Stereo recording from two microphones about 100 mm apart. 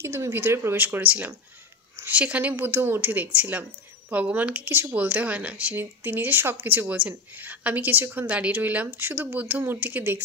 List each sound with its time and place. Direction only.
0.0 s a woman's voice: 25° right (ahead or behind)